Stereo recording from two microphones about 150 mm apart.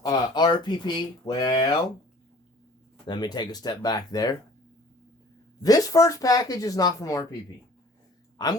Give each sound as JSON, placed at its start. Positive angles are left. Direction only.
{"t": 0.0, "sound": "speech", "side_deg": 30}
{"t": 3.1, "sound": "speech", "side_deg": 30}
{"t": 5.6, "sound": "speech", "side_deg": 25}
{"t": 8.4, "sound": "speech", "side_deg": 25}